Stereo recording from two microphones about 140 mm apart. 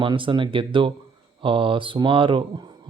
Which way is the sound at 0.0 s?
35° right (ahead or behind).